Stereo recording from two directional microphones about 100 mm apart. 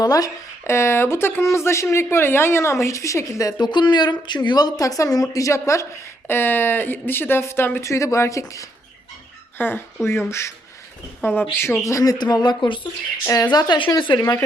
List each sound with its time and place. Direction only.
0.0 s a woman's voice: 40° left (ahead or behind)
0.6 s speech: 25° left (ahead or behind)
3.6 s a woman's voice: 50° left (ahead or behind); by 8.6 s 30° left (ahead or behind)
9.6 s a woman's voice: 20° left (ahead or behind); by 12.8 s 50° left (ahead or behind)
13.2 s a woman's voice: 30° left (ahead or behind)
13.5 s speech: 45° left (ahead or behind)